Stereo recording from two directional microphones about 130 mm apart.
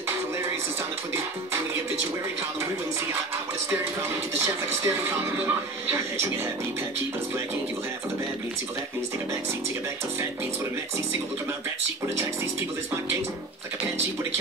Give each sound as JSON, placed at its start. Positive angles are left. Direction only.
{"t": 4.8, "sound": "speech", "side_deg": -15}